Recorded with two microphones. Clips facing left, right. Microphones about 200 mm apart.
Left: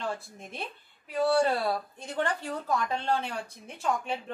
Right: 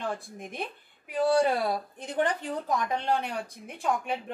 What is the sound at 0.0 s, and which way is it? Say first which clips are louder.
Speech: right 1 dB; 15° right (ahead or behind).